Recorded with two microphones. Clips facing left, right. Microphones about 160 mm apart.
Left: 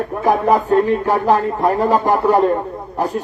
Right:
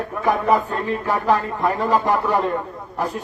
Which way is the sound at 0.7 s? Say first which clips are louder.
Left 8 dB; 40° left (ahead or behind).